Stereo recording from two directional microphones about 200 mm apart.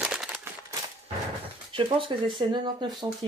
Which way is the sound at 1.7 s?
25° right (ahead or behind).